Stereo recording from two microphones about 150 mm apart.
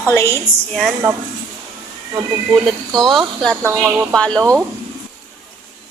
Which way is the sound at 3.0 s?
Centre (ahead or behind).